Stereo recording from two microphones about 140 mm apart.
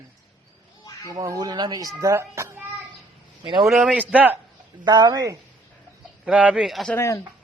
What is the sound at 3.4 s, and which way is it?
Speech, 35° right (ahead or behind).